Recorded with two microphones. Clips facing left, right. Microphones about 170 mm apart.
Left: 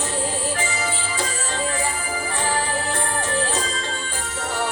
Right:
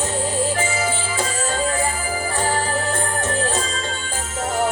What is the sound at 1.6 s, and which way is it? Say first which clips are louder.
Music: right 2 dB; 40° right (ahead or behind).